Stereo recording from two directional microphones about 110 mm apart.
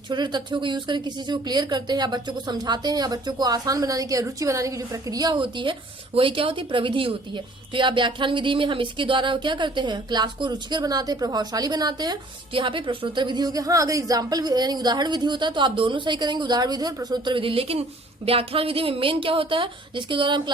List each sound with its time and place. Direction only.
0.1 s speech: 40° right (ahead or behind)
5.3 s a woman's voice: 45° right (ahead or behind)
12.5 s speech: 50° right (ahead or behind)
17.3 s a woman's voice: 55° right (ahead or behind)